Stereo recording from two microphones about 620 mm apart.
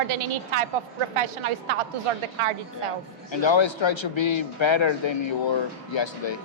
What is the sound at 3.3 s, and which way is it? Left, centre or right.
A man's voice, left.